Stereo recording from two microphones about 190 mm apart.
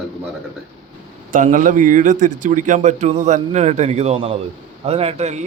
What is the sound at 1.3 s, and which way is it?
Speech, 40° right (ahead or behind).